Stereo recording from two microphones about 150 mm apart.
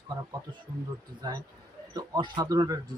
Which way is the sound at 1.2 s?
30° right (ahead or behind).